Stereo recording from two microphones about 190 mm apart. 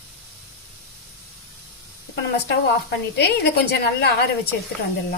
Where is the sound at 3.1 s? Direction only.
60° left (ahead or behind).